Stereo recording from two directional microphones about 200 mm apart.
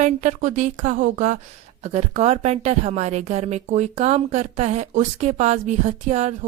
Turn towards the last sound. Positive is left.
turn(degrees=-35)  # may be behind; listen again after turning